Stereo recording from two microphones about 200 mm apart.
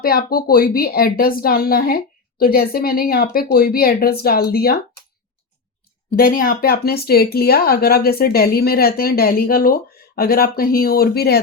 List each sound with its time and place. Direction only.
0.0 s speech: 50° left (ahead or behind)
6.1 s speech: 45° left (ahead or behind)